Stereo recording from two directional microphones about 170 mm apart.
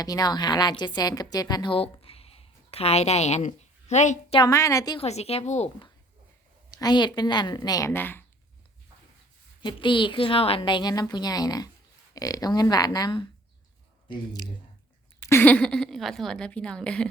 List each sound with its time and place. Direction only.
0.0 s a woman's voice: 20° left (ahead or behind); by 4.4 s 45° left (ahead or behind)
4.4 s a woman's voice: 20° left (ahead or behind)
4.9 s speech: 40° left (ahead or behind)
6.7 s a woman's voice: 25° left (ahead or behind)
9.6 s a woman's voice: 30° left (ahead or behind)
15.3 s a woman's voice: 10° left (ahead or behind)